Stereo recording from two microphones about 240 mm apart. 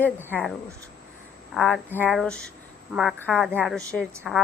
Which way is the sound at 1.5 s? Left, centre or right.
Centre.